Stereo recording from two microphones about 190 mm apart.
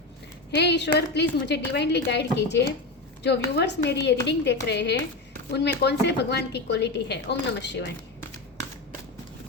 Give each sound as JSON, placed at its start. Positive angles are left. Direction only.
{"t": 0.5, "sound": "speech", "side_deg": 65}